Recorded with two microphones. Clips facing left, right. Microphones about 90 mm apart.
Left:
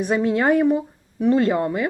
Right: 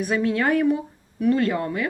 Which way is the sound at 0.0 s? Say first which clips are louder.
Left 3 dB; 25° left (ahead or behind).